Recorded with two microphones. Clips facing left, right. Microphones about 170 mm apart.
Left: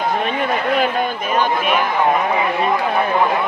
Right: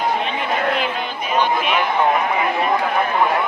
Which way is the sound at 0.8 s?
45° left (ahead or behind).